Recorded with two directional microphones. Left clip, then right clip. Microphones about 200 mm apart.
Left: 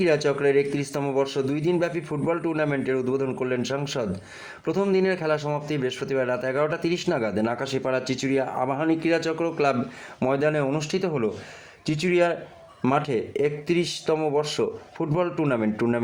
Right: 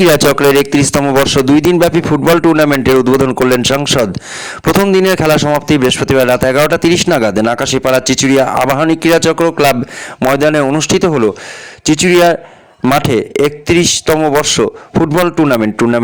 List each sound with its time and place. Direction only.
0.0 s a man's voice: 45° right (ahead or behind)